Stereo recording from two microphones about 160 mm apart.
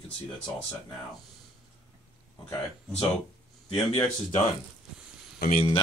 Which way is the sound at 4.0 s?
35° left (ahead or behind).